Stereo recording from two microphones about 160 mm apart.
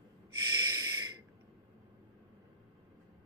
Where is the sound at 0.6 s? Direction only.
25° right (ahead or behind).